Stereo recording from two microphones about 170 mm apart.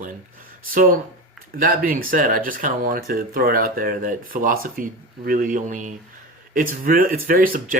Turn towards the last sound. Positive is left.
turn(degrees=-55)  # may be behind; listen again after turning